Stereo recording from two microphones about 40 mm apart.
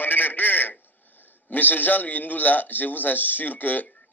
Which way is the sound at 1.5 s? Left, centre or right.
Left.